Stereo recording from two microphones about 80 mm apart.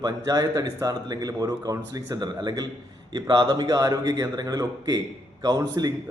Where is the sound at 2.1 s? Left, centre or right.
Right.